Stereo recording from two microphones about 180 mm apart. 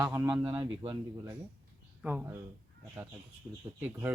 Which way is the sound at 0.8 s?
25° right (ahead or behind).